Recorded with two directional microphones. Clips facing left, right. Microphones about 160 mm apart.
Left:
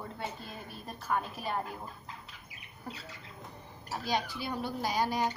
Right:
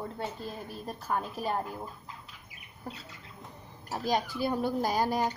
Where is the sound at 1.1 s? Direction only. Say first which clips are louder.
Right 2 dB; 35° right (ahead or behind).